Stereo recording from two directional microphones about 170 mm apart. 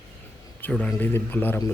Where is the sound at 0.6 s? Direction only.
5° left (ahead or behind).